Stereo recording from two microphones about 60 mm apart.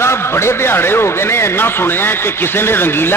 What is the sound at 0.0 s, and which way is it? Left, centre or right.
A man's voice, left.